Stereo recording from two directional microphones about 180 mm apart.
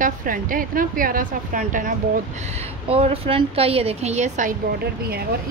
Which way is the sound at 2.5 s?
35° right (ahead or behind).